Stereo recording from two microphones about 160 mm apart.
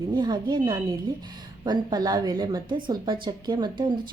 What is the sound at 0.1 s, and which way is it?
A woman's voice, 30° right (ahead or behind).